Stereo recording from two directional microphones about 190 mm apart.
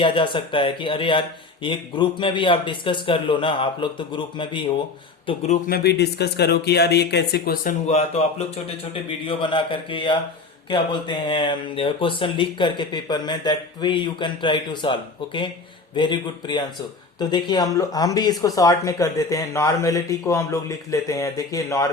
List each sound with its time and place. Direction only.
0.0 s speech: 25° left (ahead or behind)
5.6 s speech: 55° left (ahead or behind); by 21.8 s 15° left (ahead or behind)